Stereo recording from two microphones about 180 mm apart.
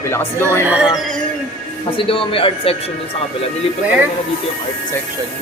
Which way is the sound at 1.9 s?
30° left (ahead or behind).